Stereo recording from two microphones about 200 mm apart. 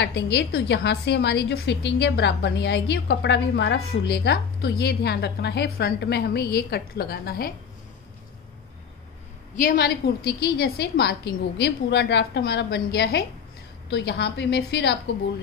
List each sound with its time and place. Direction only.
0.0 s a woman's voice: 55° left (ahead or behind)
9.6 s a woman's voice: 50° left (ahead or behind)